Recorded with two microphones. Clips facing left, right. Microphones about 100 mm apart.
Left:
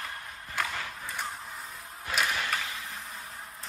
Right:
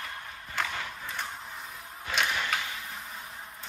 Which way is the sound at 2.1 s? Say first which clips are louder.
Even; centre (ahead or behind).